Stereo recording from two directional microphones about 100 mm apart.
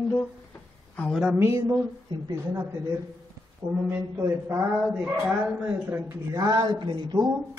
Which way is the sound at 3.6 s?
55° right (ahead or behind).